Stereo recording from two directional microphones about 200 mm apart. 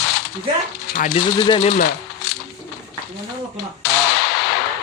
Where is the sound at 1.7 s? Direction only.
55° left (ahead or behind).